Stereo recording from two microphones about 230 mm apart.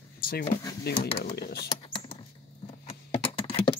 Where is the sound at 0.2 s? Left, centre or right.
Left.